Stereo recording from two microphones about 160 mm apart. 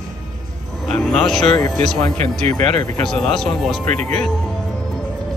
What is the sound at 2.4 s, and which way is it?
Speech, 45° right (ahead or behind).